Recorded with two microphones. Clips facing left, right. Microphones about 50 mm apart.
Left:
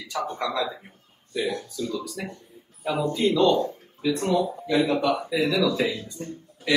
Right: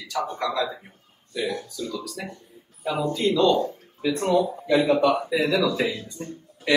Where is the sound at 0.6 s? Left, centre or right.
Centre.